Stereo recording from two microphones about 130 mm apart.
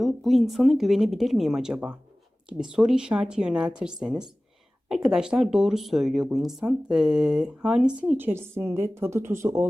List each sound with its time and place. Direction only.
0.0 s a woman's voice: centre (ahead or behind); by 9.6 s 20° right (ahead or behind)